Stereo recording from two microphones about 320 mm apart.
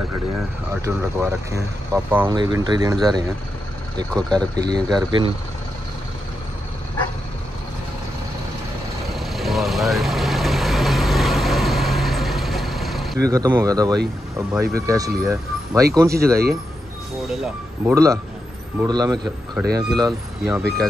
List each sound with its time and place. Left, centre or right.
0.8 s speech: centre
4.1 s speech: centre
4.6 s speech: centre
9.1 s vehicle: centre
13.3 s speech: centre
17.3 s speech: centre